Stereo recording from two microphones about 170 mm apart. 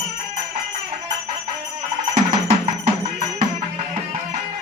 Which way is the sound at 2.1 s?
45° right (ahead or behind).